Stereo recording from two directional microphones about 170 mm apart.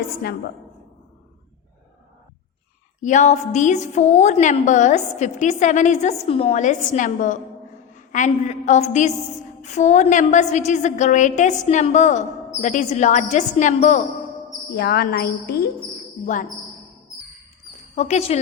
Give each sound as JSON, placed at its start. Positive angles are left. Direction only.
{"t": 3.0, "sound": "a woman's voice", "side_deg": 45}
{"t": 14.7, "sound": "a woman's voice", "side_deg": 70}
{"t": 16.2, "sound": "a woman's voice", "side_deg": 50}
{"t": 17.9, "sound": "speech", "side_deg": 40}